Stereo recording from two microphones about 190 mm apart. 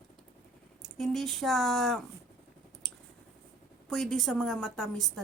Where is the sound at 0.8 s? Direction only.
Centre (ahead or behind).